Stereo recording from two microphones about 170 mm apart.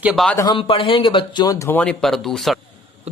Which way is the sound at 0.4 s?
30° left (ahead or behind).